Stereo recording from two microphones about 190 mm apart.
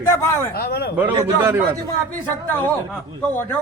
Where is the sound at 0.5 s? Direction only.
55° left (ahead or behind).